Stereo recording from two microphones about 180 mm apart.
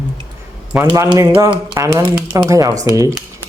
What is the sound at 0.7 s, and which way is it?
Speech, 10° right (ahead or behind).